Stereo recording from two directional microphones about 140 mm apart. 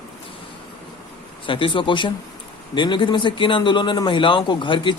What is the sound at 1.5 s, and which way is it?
A man's voice, 40° left (ahead or behind).